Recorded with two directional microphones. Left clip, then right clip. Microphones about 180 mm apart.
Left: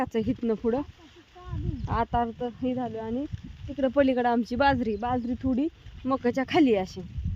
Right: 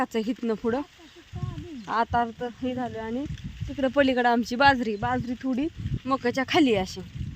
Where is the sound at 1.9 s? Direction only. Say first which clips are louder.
Right 2 dB; 5° right (ahead or behind).